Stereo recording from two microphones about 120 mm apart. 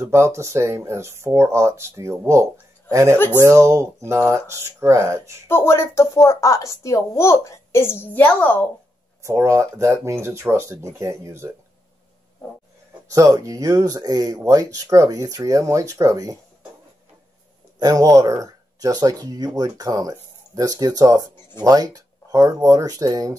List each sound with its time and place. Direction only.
0.0 s speech: 25° right (ahead or behind)
5.5 s speech: 20° left (ahead or behind)
9.2 s speech: 25° right (ahead or behind)
13.1 s speech: 25° right (ahead or behind)
17.7 s speech: 30° right (ahead or behind)